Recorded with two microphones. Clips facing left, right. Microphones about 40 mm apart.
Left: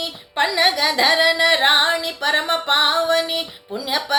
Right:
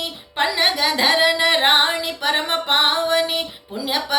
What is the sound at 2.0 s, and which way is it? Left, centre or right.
Music, centre.